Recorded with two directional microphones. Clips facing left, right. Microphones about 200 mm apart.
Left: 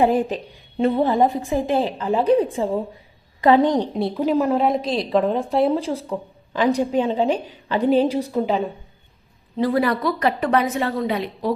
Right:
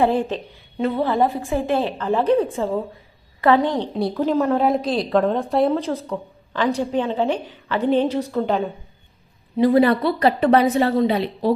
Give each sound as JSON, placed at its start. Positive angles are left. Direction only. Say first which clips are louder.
{"t": 0.0, "sound": "a woman's voice", "louder": "left 1 dB", "side_deg": 15}
{"t": 0.8, "sound": "a woman's voice", "louder": "left 2 dB", "side_deg": 25}
{"t": 9.6, "sound": "a woman's voice", "louder": "right 4 dB", "side_deg": -20}